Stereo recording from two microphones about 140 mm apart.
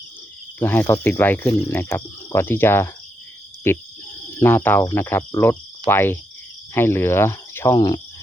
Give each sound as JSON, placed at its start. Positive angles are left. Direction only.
{"t": 0.6, "sound": "cricket", "side_deg": 15}
{"t": 4.4, "sound": "speech", "side_deg": 15}
{"t": 4.9, "sound": "cricket", "side_deg": 15}